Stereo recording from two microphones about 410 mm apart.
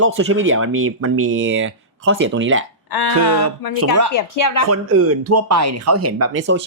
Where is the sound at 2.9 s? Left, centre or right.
Left.